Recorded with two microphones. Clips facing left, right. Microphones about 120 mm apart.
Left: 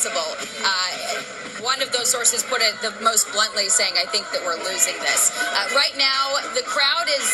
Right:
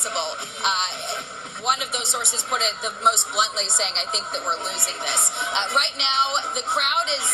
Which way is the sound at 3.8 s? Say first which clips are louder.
Left 2 dB; 65° left (ahead or behind).